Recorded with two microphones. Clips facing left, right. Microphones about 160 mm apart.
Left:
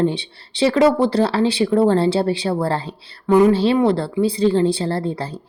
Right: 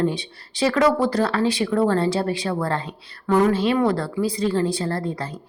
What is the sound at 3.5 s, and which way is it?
Speech, 30° left (ahead or behind).